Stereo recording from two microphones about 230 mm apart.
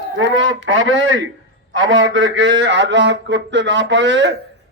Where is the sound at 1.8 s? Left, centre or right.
Right.